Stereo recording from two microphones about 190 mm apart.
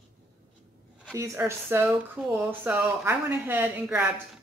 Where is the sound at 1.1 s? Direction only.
15° right (ahead or behind).